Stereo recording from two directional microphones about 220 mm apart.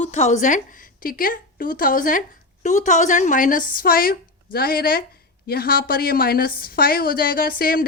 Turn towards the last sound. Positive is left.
turn(degrees=40)  # may be behind; listen again after turning